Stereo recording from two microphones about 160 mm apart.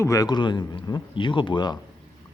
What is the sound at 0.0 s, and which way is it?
A man's voice, 20° left (ahead or behind).